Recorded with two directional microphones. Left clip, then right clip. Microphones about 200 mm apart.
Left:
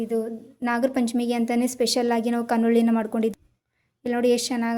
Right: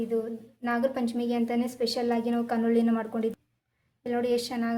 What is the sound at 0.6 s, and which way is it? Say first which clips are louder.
A woman's voice: left 4 dB; 35° left (ahead or behind).